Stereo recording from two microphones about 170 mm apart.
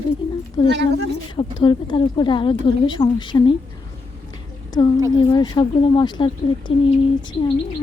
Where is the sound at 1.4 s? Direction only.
30° left (ahead or behind).